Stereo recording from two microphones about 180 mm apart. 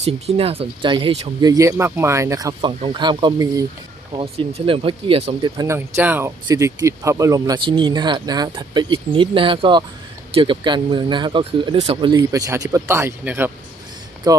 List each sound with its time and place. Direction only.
0.0 s speech: 35° right (ahead or behind)
1.4 s speech: 20° right (ahead or behind)
4.1 s speech: 30° right (ahead or behind)
5.5 s speech: 15° right (ahead or behind)